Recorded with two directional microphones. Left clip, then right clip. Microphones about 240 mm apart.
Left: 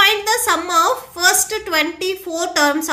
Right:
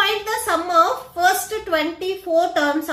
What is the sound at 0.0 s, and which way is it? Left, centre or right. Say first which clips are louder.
A woman's voice: left 6 dB; left.